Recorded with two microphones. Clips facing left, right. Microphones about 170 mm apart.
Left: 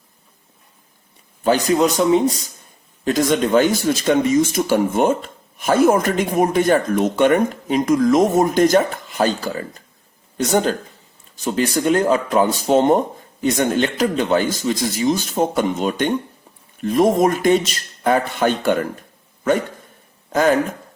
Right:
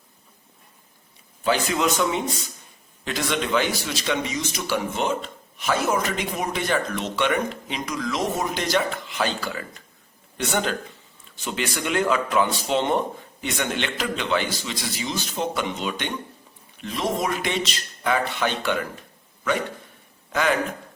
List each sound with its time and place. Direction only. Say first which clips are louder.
1.5 s a man's voice: left 6 dB; 40° left (ahead or behind)
20.3 s a man's voice: left 7 dB; 40° left (ahead or behind)